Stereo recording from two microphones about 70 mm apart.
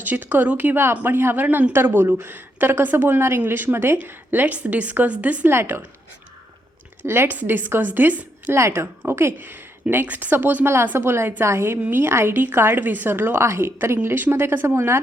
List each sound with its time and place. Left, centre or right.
0.0 s a woman's voice: right
5.5 s a woman's voice: right
7.0 s a woman's voice: right
8.5 s a woman's voice: right